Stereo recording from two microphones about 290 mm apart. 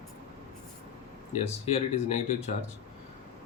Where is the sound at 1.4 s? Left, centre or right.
Left.